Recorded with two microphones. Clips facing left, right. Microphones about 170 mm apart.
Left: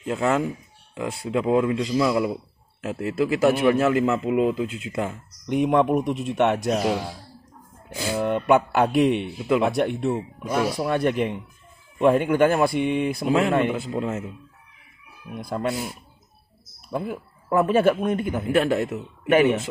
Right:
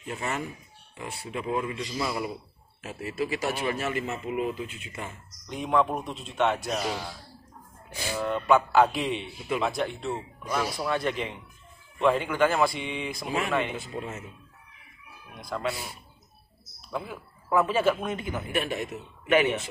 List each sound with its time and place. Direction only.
0.0 s a man's voice: 90° left; by 7.0 s 55° left (ahead or behind)
8.1 s a sound: 55° left (ahead or behind)
8.5 s a man's voice: 60° left (ahead or behind)
10.1 s a man's voice: 50° left (ahead or behind); by 13.5 s 75° left (ahead or behind)
13.5 s a man's voice: 50° left (ahead or behind)
13.8 s speech: 90° left
15.3 s a man's voice: 55° left (ahead or behind)
16.9 s a man's voice: 50° left (ahead or behind)
18.5 s a man's voice: 90° left
19.2 s speech: 50° left (ahead or behind)